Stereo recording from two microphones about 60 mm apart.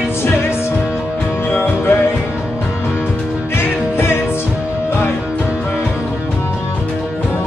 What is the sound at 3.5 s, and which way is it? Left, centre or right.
Music, left.